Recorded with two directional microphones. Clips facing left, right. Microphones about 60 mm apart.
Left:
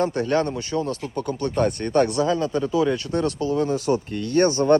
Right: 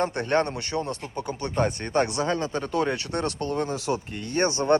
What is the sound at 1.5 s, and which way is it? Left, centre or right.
Speech, centre.